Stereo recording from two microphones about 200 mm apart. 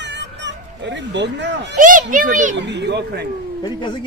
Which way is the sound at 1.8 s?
40° right (ahead or behind).